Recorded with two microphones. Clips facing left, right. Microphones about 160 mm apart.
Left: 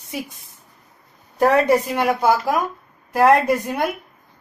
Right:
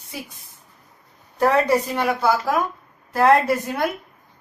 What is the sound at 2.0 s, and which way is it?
Speech, 15° left (ahead or behind).